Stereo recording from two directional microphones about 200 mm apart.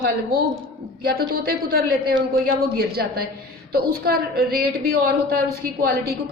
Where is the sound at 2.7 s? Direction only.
50° right (ahead or behind).